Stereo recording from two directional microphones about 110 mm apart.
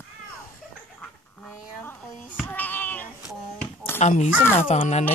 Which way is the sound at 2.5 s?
15° left (ahead or behind).